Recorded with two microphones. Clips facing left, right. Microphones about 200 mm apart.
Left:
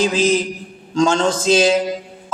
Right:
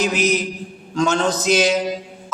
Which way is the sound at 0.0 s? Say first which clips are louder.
Left 3 dB; 30° left (ahead or behind).